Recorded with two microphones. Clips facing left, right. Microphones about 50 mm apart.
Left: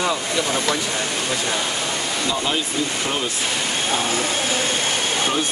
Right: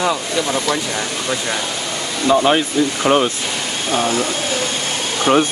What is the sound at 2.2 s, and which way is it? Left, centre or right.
Speech, right.